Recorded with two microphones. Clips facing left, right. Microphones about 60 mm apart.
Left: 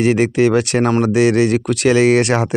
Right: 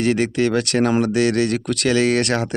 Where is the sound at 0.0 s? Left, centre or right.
Centre.